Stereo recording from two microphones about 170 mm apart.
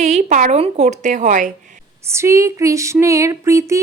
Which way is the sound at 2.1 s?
15° right (ahead or behind).